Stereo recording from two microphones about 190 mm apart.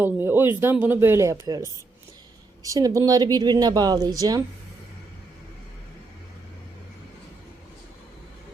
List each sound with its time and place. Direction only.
0.0 s speech: 10° right (ahead or behind)